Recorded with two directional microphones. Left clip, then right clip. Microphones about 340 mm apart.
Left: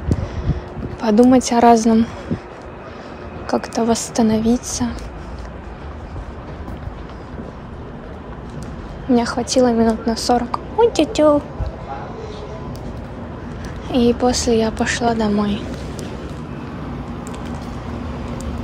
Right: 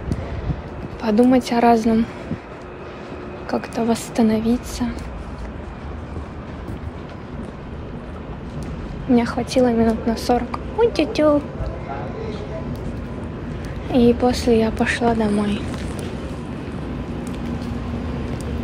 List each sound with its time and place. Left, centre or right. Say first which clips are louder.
1.0 s a woman's voice: left 3 dB; centre
3.4 s a woman's voice: left 4 dB; centre
9.1 s a woman's voice: left 2 dB; centre
13.9 s a woman's voice: even; centre